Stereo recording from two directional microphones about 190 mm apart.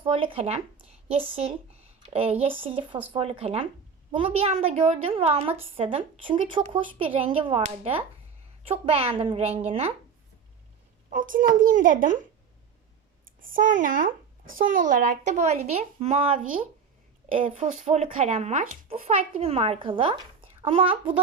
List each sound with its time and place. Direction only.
0.0 s a woman's voice: 30° right (ahead or behind)
11.1 s speech: 45° right (ahead or behind)
13.4 s speech: 45° right (ahead or behind)
17.8 s a woman's voice: 35° right (ahead or behind)